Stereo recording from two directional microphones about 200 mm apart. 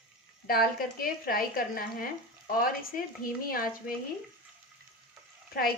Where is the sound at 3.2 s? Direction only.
45° left (ahead or behind).